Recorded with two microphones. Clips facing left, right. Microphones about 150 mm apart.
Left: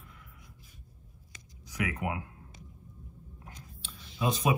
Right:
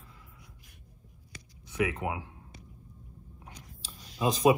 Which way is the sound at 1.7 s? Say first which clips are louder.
Right 3 dB; 25° right (ahead or behind).